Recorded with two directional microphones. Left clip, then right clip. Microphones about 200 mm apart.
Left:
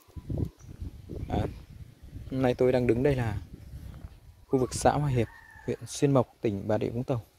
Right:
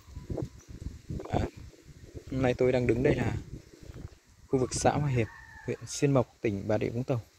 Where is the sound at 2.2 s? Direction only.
10° left (ahead or behind).